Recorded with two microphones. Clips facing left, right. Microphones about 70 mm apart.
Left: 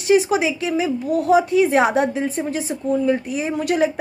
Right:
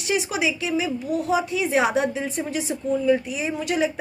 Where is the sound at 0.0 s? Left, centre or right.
Left.